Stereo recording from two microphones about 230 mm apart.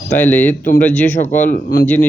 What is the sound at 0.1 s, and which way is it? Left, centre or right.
Speech, centre.